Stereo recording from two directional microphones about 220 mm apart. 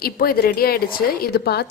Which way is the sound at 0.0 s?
40° left (ahead or behind).